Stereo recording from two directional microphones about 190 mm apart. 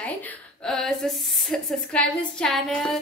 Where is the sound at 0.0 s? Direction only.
5° left (ahead or behind).